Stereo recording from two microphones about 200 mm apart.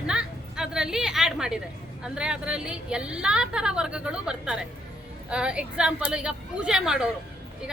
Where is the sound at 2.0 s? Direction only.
5° right (ahead or behind).